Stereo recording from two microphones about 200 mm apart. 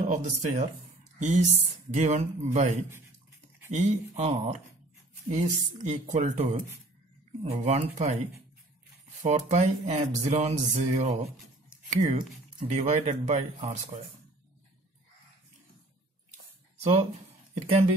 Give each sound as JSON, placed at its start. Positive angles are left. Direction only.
{"t": 0.0, "sound": "music", "side_deg": -35}
{"t": 16.8, "sound": "speech", "side_deg": -25}